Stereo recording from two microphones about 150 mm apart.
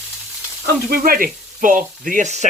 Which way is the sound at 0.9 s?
75° right (ahead or behind).